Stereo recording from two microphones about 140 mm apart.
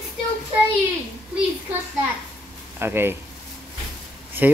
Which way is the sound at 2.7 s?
15° right (ahead or behind).